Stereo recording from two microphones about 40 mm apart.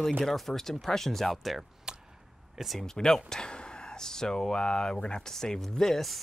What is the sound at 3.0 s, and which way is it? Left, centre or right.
Speech, centre.